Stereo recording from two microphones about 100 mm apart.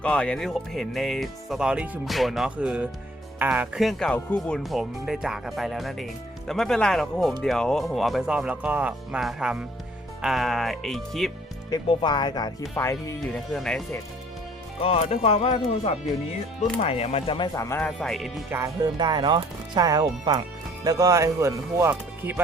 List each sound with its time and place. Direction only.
0.0 s speech: 10° left (ahead or behind); by 2.0 s 15° right (ahead or behind)
2.0 s speech: centre (ahead or behind)
2.6 s speech: 15° right (ahead or behind)
3.8 s speech: centre (ahead or behind)
11.9 s speech: 50° left (ahead or behind)
12.7 s speech: 30° left (ahead or behind)
13.3 s speech: 5° left (ahead or behind)
14.8 s speech: 80° left
17.4 s speech: 35° left (ahead or behind)
17.7 s speech: 15° left (ahead or behind)
18.5 s speech: 30° right (ahead or behind)
18.9 s speech: 45° right (ahead or behind); by 21.8 s 30° right (ahead or behind)